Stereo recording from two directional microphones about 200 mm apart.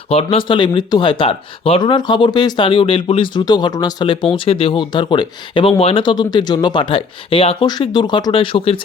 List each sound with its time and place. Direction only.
0.1 s speech: 30° left (ahead or behind)